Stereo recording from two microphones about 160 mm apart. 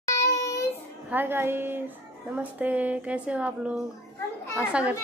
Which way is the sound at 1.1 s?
15° right (ahead or behind).